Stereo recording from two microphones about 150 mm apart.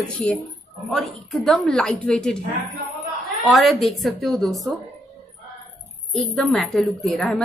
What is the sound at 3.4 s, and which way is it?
A woman's voice, centre (ahead or behind).